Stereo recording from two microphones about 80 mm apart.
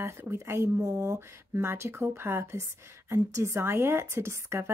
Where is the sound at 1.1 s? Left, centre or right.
Right.